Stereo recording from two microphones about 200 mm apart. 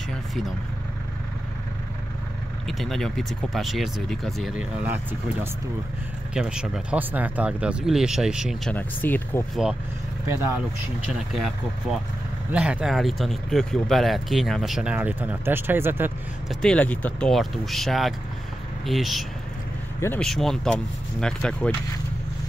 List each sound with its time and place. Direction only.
2.8 s speech: centre (ahead or behind)
8.7 s speech: 10° left (ahead or behind)
11.1 s speech: centre (ahead or behind)
16.6 s speech: 5° left (ahead or behind)